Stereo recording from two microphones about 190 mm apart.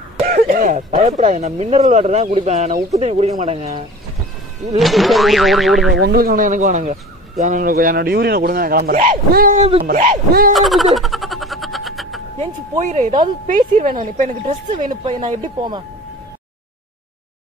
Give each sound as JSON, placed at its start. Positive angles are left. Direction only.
{"t": 0.3, "sound": "speech", "side_deg": -50}
{"t": 4.7, "sound": "speech", "side_deg": 0}
{"t": 6.1, "sound": "speech", "side_deg": -50}
{"t": 9.6, "sound": "speech", "side_deg": -30}
{"t": 9.8, "sound": "speech", "side_deg": -40}
{"t": 10.5, "sound": "a sound", "side_deg": 0}
{"t": 12.4, "sound": "speech", "side_deg": -35}
{"t": 15.0, "sound": "speech", "side_deg": -25}